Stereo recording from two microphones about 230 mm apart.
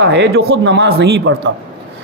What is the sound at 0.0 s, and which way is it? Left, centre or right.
A man's voice, right.